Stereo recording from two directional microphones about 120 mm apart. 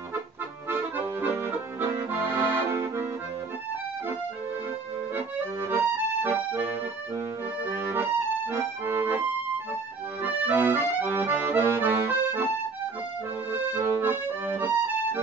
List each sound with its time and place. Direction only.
0.7 s accordion: 15° right (ahead or behind)
5.1 s accordion: 20° right (ahead or behind)
7.7 s accordion: 20° right (ahead or behind)
10.4 s accordion: 20° right (ahead or behind)
13.5 s accordion: 20° right (ahead or behind)